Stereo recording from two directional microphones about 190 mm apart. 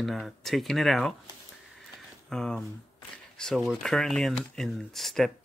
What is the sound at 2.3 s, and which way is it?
Speech, 5° left (ahead or behind).